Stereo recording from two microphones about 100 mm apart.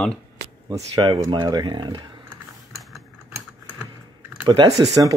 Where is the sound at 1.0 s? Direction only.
45° right (ahead or behind).